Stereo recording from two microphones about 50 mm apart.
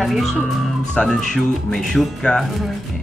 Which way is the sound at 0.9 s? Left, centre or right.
Centre.